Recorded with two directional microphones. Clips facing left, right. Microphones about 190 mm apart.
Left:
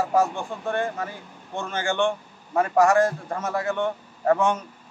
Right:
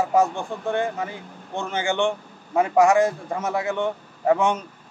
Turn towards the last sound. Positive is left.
turn(degrees=-15)  # may be behind; listen again after turning